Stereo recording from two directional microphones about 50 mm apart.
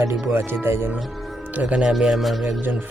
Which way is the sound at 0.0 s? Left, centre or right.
Right.